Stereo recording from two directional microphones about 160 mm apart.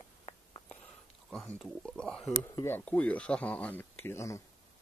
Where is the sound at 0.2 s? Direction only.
30° left (ahead or behind).